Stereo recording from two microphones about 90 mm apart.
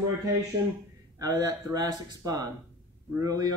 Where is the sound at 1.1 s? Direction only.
40° right (ahead or behind).